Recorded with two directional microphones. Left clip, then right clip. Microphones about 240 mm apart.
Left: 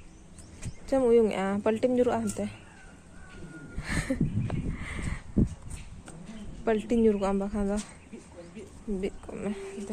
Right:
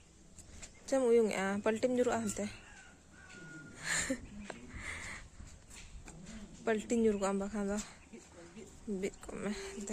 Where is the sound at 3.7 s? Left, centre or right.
Centre.